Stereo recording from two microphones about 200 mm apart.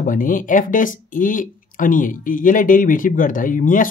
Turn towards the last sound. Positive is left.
turn(degrees=40)  # may be behind; listen again after turning